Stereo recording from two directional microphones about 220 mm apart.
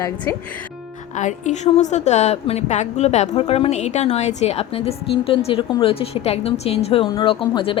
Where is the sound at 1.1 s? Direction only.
30° left (ahead or behind).